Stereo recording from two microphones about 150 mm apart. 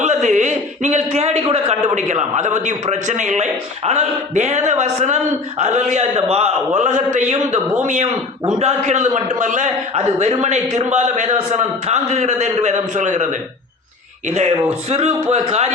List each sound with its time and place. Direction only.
0.0 s a sound: 50° right (ahead or behind)
2.0 s a man's voice: 50° right (ahead or behind)
14.3 s a man's voice: 50° right (ahead or behind)